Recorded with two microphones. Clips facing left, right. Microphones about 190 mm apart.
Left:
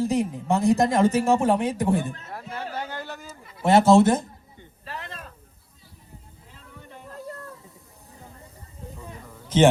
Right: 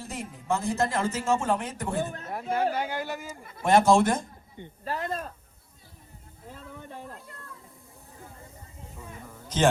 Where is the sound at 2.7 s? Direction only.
10° right (ahead or behind).